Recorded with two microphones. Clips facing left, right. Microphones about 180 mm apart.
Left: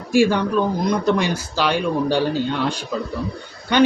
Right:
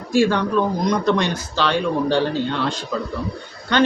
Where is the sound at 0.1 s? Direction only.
10° left (ahead or behind).